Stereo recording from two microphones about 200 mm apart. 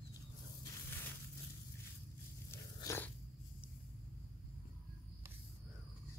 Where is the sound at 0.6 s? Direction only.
15° left (ahead or behind).